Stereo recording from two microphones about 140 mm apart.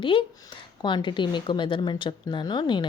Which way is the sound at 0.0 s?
35° left (ahead or behind).